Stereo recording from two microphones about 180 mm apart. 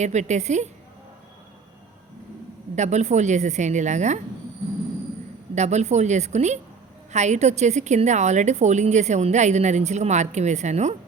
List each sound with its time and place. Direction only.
0.0 s a woman's voice: 40° right (ahead or behind)
2.7 s a woman's voice: 40° right (ahead or behind)
5.5 s a woman's voice: 40° right (ahead or behind)